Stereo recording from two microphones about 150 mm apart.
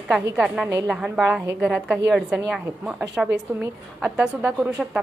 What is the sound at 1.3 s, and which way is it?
A woman's voice, 10° right (ahead or behind).